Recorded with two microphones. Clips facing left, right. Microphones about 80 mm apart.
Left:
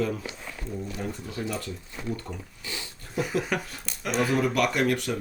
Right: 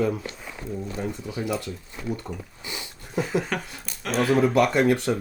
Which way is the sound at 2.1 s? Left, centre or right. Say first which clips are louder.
Right 3 dB; centre.